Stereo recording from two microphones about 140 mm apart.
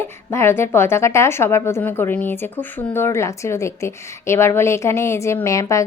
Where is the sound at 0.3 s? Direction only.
15° left (ahead or behind).